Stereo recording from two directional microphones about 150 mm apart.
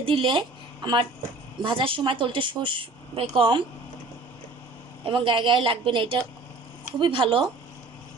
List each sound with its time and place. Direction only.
0.0 s a woman's voice: 35° right (ahead or behind)
5.0 s a woman's voice: 35° right (ahead or behind)